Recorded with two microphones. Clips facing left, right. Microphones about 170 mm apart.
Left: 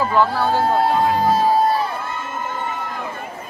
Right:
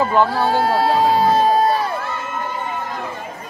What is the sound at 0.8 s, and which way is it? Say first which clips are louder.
Speech: right 2 dB; 80° right.